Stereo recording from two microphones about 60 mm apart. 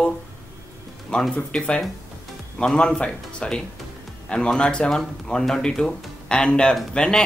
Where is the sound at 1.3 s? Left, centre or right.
Centre.